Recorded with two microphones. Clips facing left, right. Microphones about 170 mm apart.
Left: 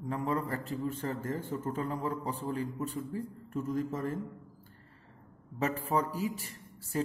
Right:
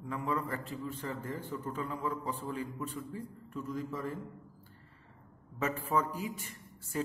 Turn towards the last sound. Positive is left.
turn(degrees=35)  # may be behind; listen again after turning